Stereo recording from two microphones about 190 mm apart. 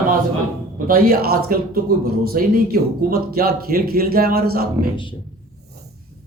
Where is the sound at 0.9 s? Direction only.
50° right (ahead or behind).